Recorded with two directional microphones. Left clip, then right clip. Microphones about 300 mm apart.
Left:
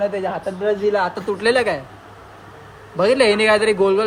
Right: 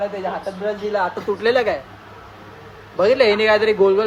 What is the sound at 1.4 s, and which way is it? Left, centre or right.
Speech, left.